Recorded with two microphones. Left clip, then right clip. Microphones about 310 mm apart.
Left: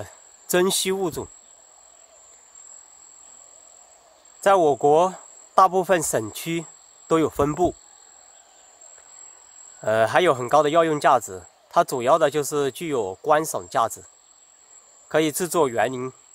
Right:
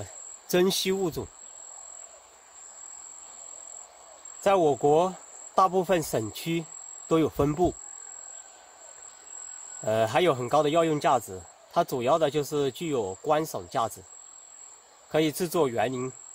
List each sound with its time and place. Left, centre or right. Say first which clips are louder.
0.0 s cricket: left 3 dB; left
4.4 s speech: left 5 dB; left
7.4 s speech: left 4 dB; left
9.8 s speech: left 5 dB; left
15.0 s speech: left 4 dB; left